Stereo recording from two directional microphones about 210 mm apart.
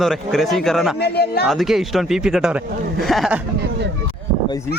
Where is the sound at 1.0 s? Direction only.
50° left (ahead or behind).